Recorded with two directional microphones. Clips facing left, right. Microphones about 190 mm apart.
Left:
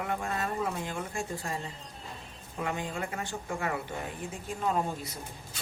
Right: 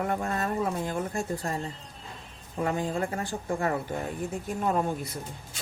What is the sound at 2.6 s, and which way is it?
Speech, 35° right (ahead or behind).